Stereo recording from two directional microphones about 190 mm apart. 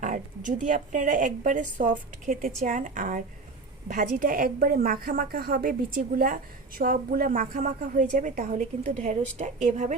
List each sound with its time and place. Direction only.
0.0 s a woman's voice: 40° right (ahead or behind)